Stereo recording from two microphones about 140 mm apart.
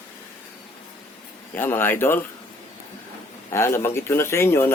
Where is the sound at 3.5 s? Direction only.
20° left (ahead or behind).